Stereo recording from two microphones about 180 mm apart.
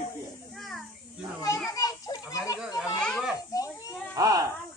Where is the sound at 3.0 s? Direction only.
5° left (ahead or behind).